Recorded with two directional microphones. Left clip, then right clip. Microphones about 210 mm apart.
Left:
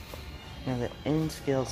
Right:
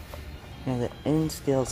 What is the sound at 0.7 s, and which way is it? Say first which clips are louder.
Speech: right 3 dB; 20° right (ahead or behind).